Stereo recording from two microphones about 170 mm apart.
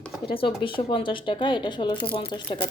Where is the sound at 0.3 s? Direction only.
30° left (ahead or behind).